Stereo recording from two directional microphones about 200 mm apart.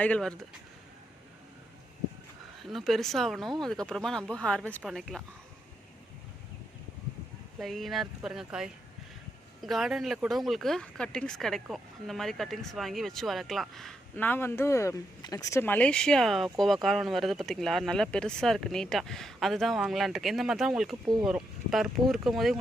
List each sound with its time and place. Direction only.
0.0 s speech: 5° left (ahead or behind)
2.6 s speech: centre (ahead or behind)
7.6 s speech: centre (ahead or behind)